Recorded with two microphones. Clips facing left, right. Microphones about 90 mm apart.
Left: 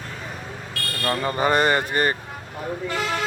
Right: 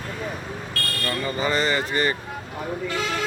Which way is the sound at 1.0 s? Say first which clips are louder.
Left 4 dB; 60° left (ahead or behind).